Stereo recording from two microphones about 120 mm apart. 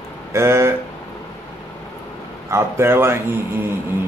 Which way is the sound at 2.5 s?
20° right (ahead or behind).